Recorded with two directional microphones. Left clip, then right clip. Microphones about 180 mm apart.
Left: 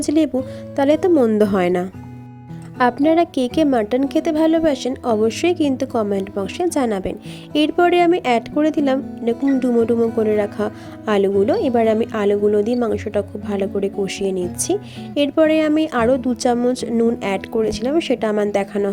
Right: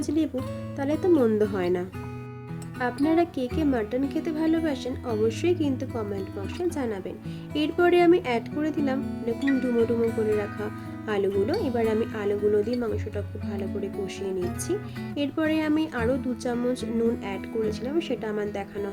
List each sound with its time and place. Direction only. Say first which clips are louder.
0.0 s a woman's voice: left 9 dB; 45° left (ahead or behind)